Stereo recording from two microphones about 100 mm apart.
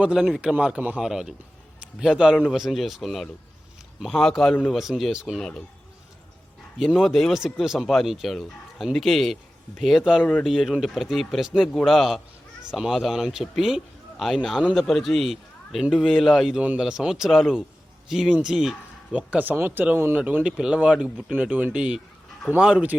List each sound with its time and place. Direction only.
0.2 s speech: centre (ahead or behind)
0.4 s speech: 10° right (ahead or behind); by 5.6 s 5° left (ahead or behind)
6.7 s speech: centre (ahead or behind)